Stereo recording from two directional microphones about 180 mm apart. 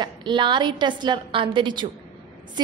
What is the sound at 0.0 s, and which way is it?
A woman's voice, 25° right (ahead or behind).